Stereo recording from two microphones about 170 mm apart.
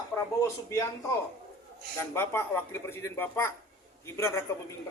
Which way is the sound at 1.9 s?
15° left (ahead or behind).